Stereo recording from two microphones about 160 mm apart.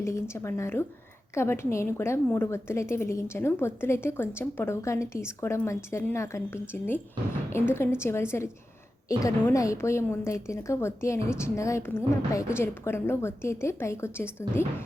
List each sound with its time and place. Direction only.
0.0 s a woman's voice: 20° left (ahead or behind)